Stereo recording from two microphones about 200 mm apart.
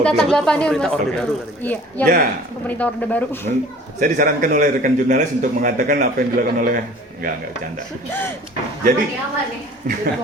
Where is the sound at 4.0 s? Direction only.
45° right (ahead or behind).